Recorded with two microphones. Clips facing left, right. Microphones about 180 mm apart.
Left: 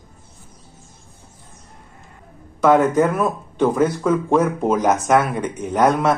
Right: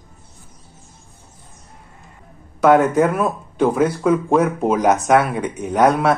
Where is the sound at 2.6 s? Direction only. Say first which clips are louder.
Right 1 dB; 5° right (ahead or behind).